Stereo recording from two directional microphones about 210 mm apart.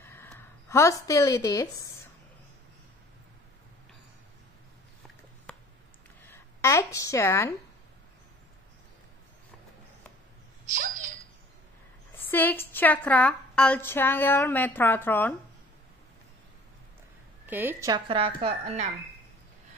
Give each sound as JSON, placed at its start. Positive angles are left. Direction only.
{"t": 0.0, "sound": "a woman's voice", "side_deg": 10}
{"t": 5.5, "sound": "a sound", "side_deg": 5}
{"t": 6.2, "sound": "speech", "side_deg": 10}
{"t": 12.3, "sound": "a woman's voice", "side_deg": 10}
{"t": 17.5, "sound": "a woman's voice", "side_deg": -10}